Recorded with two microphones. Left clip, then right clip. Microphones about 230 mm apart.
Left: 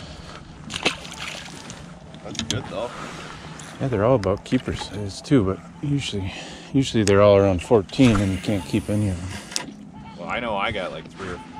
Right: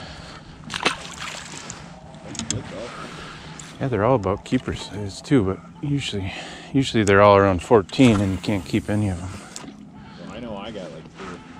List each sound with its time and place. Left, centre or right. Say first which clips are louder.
0.7 s slosh: right 1 dB; centre
2.3 s speech: left 3 dB; centre
3.8 s speech: even; centre
10.3 s a sound: left 10 dB; centre